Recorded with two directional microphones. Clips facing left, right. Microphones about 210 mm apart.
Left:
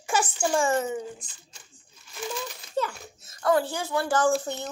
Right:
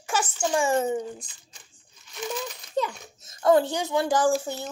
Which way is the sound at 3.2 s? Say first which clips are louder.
Right 4 dB; 25° right (ahead or behind).